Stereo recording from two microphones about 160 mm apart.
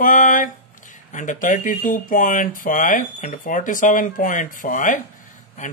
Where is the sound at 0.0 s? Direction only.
55° left (ahead or behind).